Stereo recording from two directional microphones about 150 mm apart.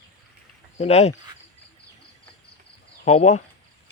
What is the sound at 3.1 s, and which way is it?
Speech, 50° left (ahead or behind).